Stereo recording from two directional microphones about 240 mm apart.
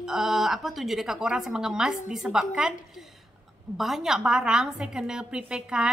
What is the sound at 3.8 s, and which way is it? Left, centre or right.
A woman's voice, centre.